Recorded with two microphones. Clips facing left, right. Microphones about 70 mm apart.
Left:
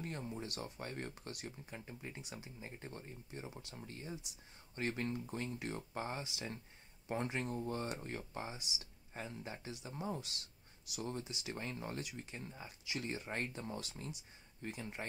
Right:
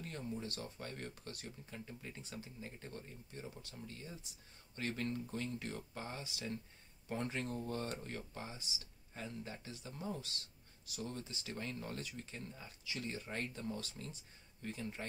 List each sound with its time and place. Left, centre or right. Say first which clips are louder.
0.0 s speech: even; left